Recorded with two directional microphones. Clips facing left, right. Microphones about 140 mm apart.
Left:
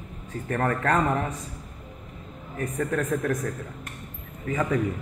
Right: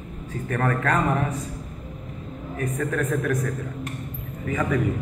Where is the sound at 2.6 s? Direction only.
25° left (ahead or behind).